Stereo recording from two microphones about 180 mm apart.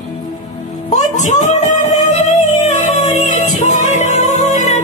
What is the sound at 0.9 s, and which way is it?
Music, 40° left (ahead or behind).